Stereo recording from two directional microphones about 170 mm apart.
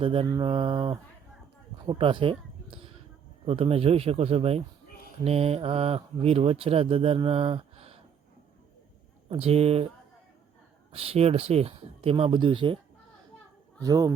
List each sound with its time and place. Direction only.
0.0 s speech: 30° right (ahead or behind)
9.3 s speech: 35° right (ahead or behind)
10.9 s speech: 35° right (ahead or behind)
13.8 s speech: 20° right (ahead or behind)